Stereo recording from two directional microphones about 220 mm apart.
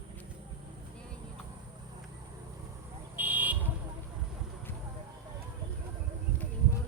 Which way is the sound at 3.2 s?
10° right (ahead or behind).